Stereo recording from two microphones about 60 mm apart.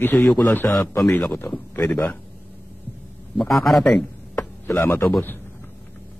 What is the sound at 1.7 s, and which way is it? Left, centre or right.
Speech, left.